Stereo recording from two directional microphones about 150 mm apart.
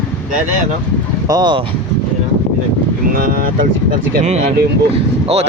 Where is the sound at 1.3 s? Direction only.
30° right (ahead or behind).